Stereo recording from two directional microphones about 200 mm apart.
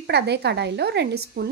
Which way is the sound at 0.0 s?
55° right (ahead or behind).